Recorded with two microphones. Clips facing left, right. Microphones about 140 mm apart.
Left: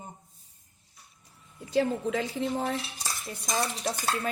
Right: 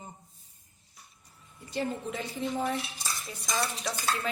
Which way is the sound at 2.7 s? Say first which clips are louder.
Even; 45° left (ahead or behind).